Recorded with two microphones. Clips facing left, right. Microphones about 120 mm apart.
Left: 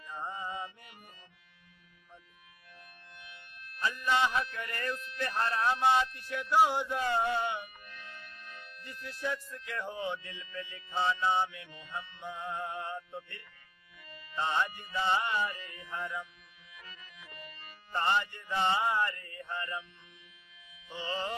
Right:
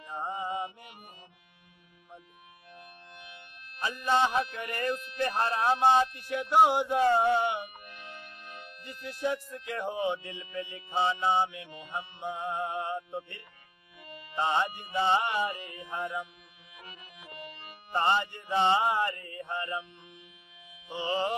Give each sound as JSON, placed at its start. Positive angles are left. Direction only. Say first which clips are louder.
{"t": 0.0, "sound": "music", "louder": "right 5 dB", "side_deg": -20}
{"t": 2.7, "sound": "music", "louder": "right 5 dB", "side_deg": -20}
{"t": 4.1, "sound": "speech", "louder": "right 4 dB", "side_deg": -30}
{"t": 14.0, "sound": "music", "louder": "right 4 dB", "side_deg": -15}